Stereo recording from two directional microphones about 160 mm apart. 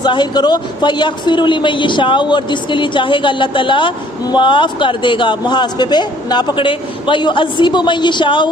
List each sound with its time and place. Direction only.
0.0 s speech: 30° left (ahead or behind)